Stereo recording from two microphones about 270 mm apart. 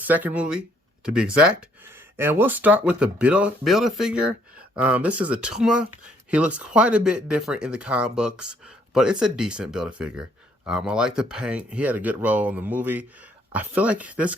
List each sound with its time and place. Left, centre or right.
0.0 s speech: centre